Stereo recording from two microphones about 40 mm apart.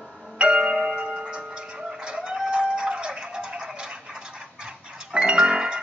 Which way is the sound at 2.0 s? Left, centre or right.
Right.